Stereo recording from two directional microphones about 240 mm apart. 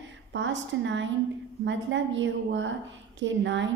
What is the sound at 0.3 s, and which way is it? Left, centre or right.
A woman's voice, right.